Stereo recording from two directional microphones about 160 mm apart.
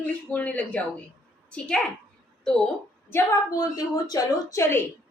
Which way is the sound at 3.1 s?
20° left (ahead or behind).